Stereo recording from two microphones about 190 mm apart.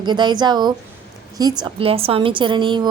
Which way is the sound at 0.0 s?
25° right (ahead or behind).